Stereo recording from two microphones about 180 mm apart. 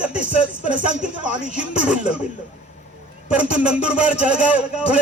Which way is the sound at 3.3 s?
5° right (ahead or behind).